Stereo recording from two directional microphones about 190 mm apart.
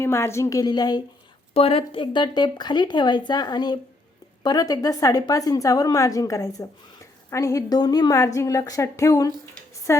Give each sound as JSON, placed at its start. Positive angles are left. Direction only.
{"t": 0.0, "sound": "a woman's voice", "side_deg": 15}